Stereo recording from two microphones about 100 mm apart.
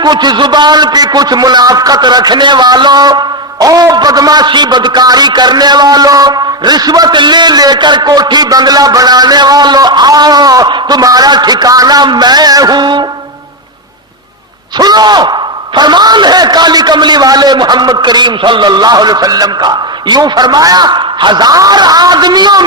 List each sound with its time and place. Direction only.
0.0 s a man's voice: 45° right (ahead or behind)
14.8 s a man's voice: 45° right (ahead or behind)